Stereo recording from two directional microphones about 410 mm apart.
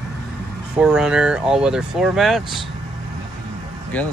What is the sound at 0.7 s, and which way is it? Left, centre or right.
Speech, centre.